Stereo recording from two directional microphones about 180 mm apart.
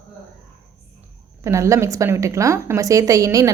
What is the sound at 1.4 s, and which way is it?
A woman's voice, 15° right (ahead or behind).